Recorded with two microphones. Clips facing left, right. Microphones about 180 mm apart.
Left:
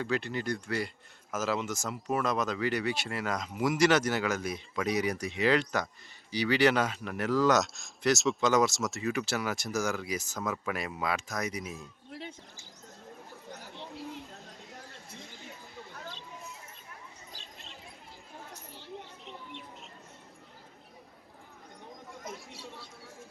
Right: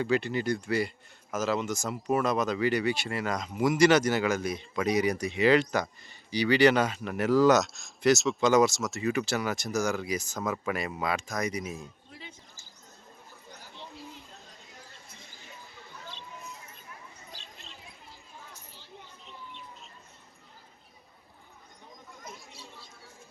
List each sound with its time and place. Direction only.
0.0 s speech: centre (ahead or behind)
18.7 s a sound: 65° left (ahead or behind)
22.2 s chatter: 80° left